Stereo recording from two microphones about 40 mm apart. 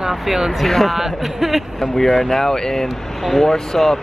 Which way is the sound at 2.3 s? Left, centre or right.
Centre.